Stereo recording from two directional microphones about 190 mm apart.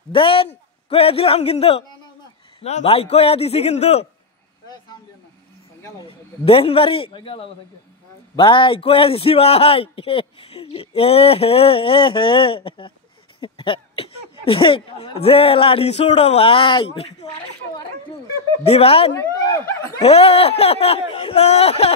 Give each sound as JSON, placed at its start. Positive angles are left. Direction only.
{"t": 0.1, "sound": "a man's voice", "side_deg": 30}
{"t": 6.0, "sound": "a man's voice", "side_deg": 30}
{"t": 18.6, "sound": "speech", "side_deg": 30}
{"t": 19.1, "sound": "speech", "side_deg": 15}
{"t": 20.0, "sound": "speech", "side_deg": 30}